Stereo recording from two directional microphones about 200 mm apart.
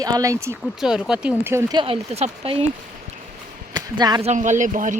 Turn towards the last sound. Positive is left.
turn(degrees=-40)  # may be behind; listen again after turning